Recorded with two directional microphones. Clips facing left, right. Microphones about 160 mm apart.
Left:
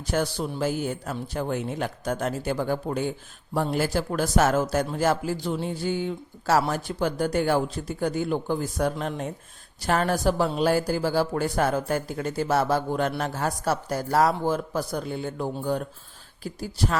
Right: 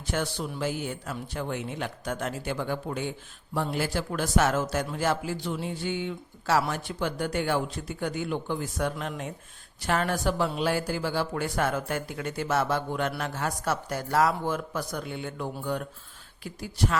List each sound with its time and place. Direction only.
0.1 s a man's voice: 40° left (ahead or behind)